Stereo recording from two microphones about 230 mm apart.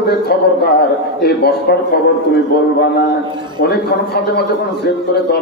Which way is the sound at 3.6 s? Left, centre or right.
Left.